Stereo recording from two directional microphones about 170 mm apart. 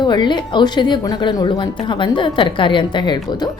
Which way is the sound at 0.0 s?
25° left (ahead or behind).